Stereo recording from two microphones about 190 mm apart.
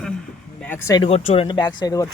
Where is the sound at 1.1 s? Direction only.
35° left (ahead or behind).